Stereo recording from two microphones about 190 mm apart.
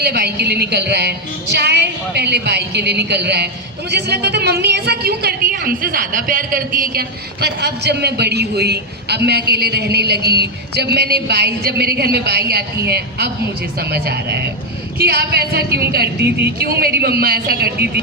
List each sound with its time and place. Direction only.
0.0 s a man's voice: 55° right (ahead or behind)
7.4 s a man's voice: 60° right (ahead or behind)